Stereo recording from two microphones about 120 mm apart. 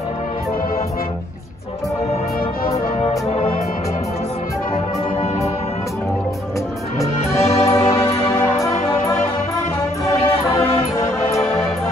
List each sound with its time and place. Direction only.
3.0 s music: 55° left (ahead or behind)
7.0 s music: 25° left (ahead or behind)
10.2 s music: 55° left (ahead or behind)